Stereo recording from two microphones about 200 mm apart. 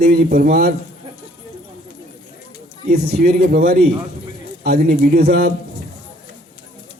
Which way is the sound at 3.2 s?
50° right (ahead or behind).